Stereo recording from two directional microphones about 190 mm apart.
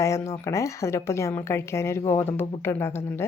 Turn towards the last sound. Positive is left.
turn(degrees=15)  # may be behind; listen again after turning